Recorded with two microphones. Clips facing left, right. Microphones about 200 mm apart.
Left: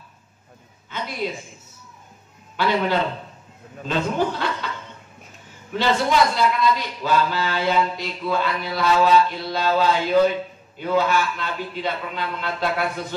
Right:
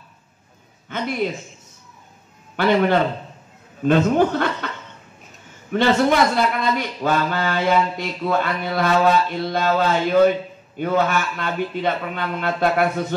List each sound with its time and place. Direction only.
0.8 s a man's voice: 50° right (ahead or behind)
2.5 s a man's voice: 50° right (ahead or behind)
5.7 s a man's voice: 55° right (ahead or behind)